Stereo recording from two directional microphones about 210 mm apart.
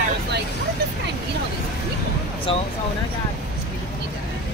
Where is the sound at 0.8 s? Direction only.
50° right (ahead or behind).